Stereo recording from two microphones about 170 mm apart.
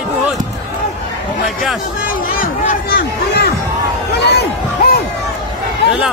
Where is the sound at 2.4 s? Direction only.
60° left (ahead or behind).